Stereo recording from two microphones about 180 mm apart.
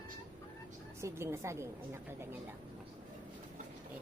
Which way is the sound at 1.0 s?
15° right (ahead or behind).